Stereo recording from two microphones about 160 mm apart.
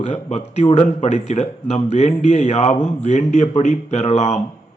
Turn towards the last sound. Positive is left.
turn(degrees=45)  # may be behind; listen again after turning